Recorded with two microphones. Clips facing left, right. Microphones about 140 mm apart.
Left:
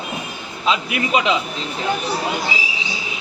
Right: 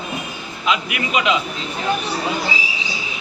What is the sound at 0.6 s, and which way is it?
Speech, 30° left (ahead or behind).